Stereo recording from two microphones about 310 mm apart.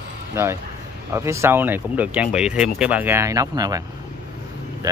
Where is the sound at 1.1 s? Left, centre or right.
Centre.